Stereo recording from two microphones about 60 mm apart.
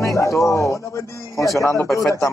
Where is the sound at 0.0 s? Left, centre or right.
Left.